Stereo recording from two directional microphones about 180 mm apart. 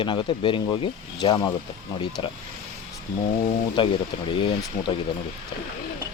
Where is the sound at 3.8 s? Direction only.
25° left (ahead or behind).